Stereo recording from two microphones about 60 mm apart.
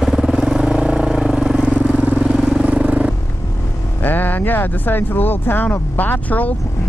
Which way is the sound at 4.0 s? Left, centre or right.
Left.